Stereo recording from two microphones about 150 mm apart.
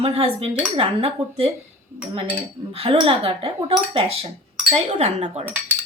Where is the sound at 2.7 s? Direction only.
40° right (ahead or behind).